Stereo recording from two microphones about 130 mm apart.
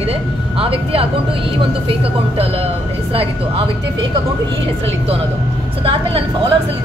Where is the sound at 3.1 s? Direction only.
45° right (ahead or behind).